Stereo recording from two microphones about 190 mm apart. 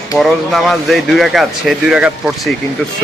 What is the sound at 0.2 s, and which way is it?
Speech, centre (ahead or behind).